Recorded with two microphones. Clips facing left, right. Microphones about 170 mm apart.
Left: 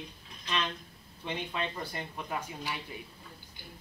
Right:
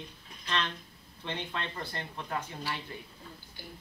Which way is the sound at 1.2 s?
10° left (ahead or behind).